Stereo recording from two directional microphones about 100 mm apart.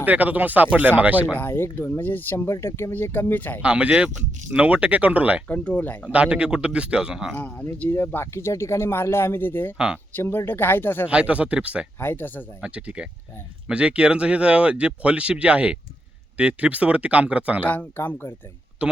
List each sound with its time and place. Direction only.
0.0 s speech: 15° right (ahead or behind)
1.3 s speech: 20° left (ahead or behind)
3.6 s speech: 10° right (ahead or behind)
5.5 s speech: 15° left (ahead or behind)
6.1 s speech: 10° right (ahead or behind)
7.3 s speech: 15° left (ahead or behind)
9.7 s speech: 10° right (ahead or behind)
10.2 s speech: 20° left (ahead or behind)
11.1 s speech: 10° right (ahead or behind)
11.9 s speech: 20° left (ahead or behind)
12.6 s speech: 10° right (ahead or behind)
17.6 s speech: 15° left (ahead or behind)
18.8 s speech: 10° right (ahead or behind)